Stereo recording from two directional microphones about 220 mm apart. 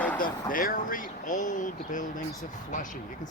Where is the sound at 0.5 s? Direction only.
40° left (ahead or behind).